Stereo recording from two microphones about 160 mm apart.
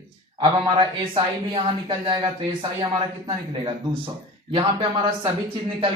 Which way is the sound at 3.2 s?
35° right (ahead or behind).